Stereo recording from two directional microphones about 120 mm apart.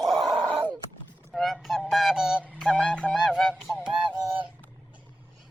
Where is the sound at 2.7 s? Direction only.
5° left (ahead or behind).